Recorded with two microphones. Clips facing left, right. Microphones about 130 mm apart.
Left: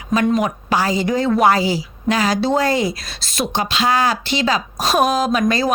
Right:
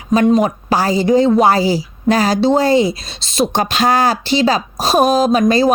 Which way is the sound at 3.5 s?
45° right (ahead or behind).